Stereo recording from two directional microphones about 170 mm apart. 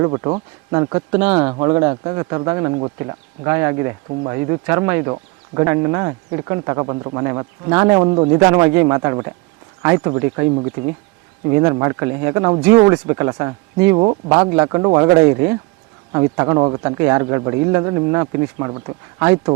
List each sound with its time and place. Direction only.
0.0 s speech: 25° right (ahead or behind)
11.5 s speech: 20° right (ahead or behind)
13.9 s speech: 30° right (ahead or behind)